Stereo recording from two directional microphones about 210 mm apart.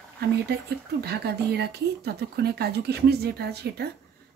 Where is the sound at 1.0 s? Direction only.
50° right (ahead or behind).